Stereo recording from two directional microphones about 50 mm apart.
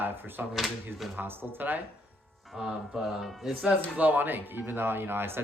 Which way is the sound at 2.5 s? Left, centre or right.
Centre.